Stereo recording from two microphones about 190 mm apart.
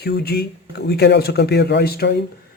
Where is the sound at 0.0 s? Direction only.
55° left (ahead or behind).